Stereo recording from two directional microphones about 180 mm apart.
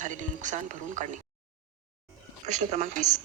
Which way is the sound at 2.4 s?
40° right (ahead or behind).